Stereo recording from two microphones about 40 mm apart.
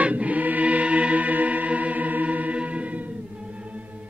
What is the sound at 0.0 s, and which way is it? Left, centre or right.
Music, right.